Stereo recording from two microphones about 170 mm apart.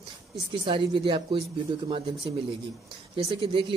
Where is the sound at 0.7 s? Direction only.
30° right (ahead or behind).